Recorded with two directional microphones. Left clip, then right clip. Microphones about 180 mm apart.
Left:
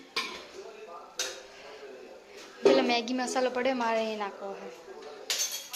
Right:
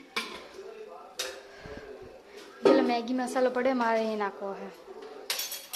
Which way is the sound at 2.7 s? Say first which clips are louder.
Right 1 dB; 15° right (ahead or behind).